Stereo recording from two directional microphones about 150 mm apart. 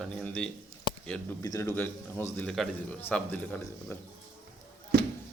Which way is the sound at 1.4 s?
20° left (ahead or behind).